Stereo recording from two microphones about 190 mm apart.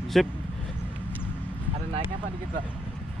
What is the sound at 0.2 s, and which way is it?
Speech, centre (ahead or behind).